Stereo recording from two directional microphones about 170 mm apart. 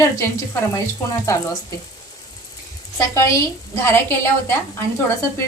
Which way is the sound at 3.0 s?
20° left (ahead or behind).